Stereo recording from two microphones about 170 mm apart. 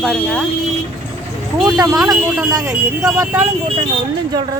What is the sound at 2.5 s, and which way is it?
Speech, 20° right (ahead or behind).